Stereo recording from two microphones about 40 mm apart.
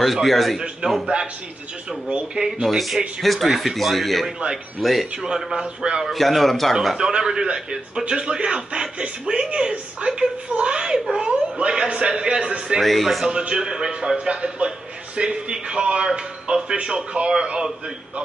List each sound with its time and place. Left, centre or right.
0.0 s speech: centre
0.8 s speech: right
2.4 s a man's voice: centre
5.2 s a man's voice: centre
6.1 s speech: centre
7.0 s speech: centre
12.8 s speech: centre
13.4 s speech: right